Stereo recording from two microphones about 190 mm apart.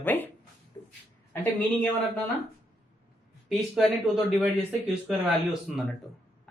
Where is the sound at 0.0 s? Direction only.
10° left (ahead or behind).